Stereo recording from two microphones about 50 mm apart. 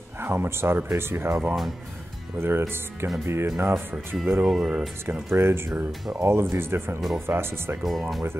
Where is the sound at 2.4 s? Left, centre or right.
Right.